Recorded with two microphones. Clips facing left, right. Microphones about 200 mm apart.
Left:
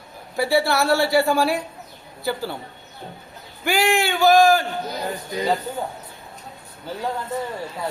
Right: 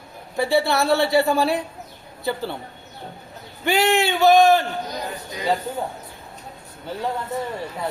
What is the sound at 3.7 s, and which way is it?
Speech, 25° right (ahead or behind).